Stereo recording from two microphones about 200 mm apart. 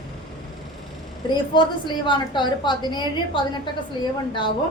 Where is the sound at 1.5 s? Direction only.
25° left (ahead or behind).